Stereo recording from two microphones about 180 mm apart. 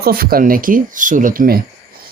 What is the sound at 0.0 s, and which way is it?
Speech, 55° right (ahead or behind).